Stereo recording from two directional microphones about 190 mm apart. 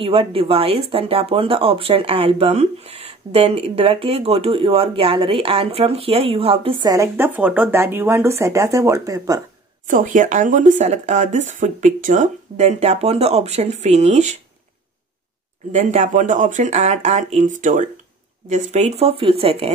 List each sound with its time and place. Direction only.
0.0 s speech: 30° right (ahead or behind)
9.8 s speech: 45° right (ahead or behind)
15.7 s speech: 35° right (ahead or behind)